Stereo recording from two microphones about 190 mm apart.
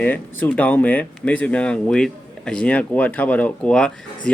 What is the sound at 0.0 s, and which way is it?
Speech, 10° left (ahead or behind).